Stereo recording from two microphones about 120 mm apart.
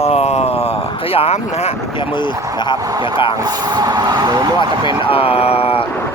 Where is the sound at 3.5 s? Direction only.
35° right (ahead or behind).